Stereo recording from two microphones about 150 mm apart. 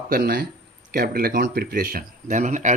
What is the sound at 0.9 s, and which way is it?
Speech, 85° right.